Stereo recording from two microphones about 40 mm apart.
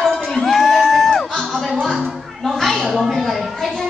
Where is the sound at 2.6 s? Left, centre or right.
Centre.